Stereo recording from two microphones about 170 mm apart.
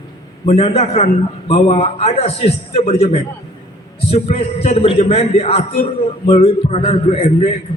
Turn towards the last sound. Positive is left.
turn(degrees=40)  # may be behind; listen again after turning